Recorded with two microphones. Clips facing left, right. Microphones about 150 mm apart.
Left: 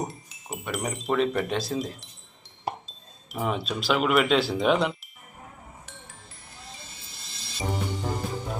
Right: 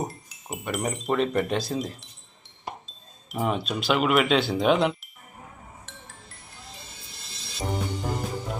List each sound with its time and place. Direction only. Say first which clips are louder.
0.0 s speech: right 1 dB; centre (ahead or behind)
3.3 s speech: right 2 dB; centre (ahead or behind)
5.8 s music: right 1 dB; centre (ahead or behind)